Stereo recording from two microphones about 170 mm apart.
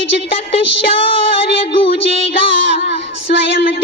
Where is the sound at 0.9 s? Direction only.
35° left (ahead or behind).